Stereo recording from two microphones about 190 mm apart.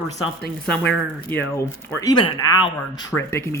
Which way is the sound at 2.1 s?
20° left (ahead or behind).